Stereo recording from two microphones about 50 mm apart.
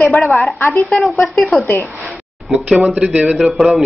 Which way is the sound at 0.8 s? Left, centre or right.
Centre.